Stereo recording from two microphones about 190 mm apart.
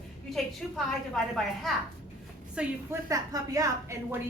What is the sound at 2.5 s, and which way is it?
A woman's voice, 15° right (ahead or behind).